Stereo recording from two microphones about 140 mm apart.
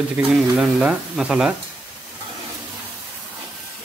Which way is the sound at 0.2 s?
10° right (ahead or behind).